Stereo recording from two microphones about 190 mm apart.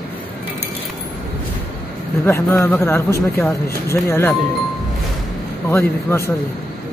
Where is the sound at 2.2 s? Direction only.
15° left (ahead or behind).